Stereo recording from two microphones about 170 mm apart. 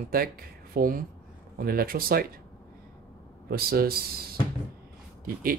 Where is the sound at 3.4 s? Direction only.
65° right (ahead or behind).